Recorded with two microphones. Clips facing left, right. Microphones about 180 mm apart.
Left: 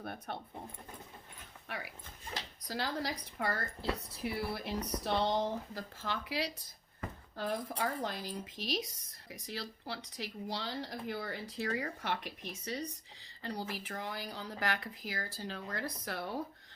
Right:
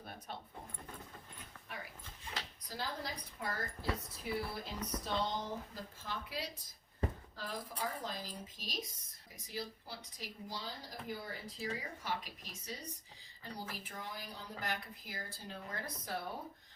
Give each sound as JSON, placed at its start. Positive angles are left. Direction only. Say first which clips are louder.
{"t": 0.0, "sound": "dog", "louder": "left 6 dB", "side_deg": 60}
{"t": 1.6, "sound": "speech", "louder": "left 5 dB", "side_deg": 75}
{"t": 7.3, "sound": "a woman's voice", "louder": "left 7 dB", "side_deg": 65}